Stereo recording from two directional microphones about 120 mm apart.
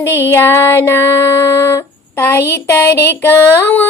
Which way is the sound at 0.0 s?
20° left (ahead or behind).